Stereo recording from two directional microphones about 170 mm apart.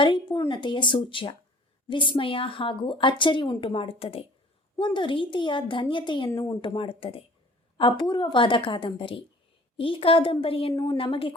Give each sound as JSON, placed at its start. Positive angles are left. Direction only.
{"t": 0.0, "sound": "a child's voice", "side_deg": 30}